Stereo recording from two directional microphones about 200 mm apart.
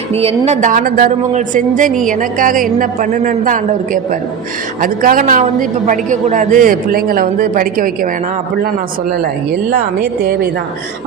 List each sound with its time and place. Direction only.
0.1 s a woman's voice: 30° right (ahead or behind)
9.6 s a man's voice: 45° right (ahead or behind)